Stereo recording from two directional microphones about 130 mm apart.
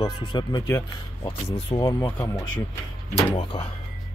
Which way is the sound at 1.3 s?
45° left (ahead or behind).